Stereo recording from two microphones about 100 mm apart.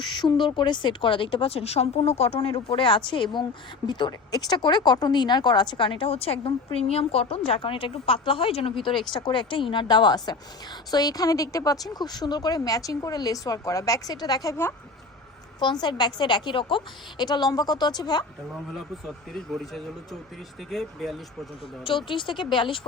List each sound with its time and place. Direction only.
0.0 s speech: 50° left (ahead or behind); by 6.5 s 75° left (ahead or behind)
6.7 s a woman's voice: 85° left; by 14.5 s 40° left (ahead or behind)
15.6 s speech: 50° left (ahead or behind)
18.7 s a man's voice: centre (ahead or behind)
21.8 s speech: 60° left (ahead or behind)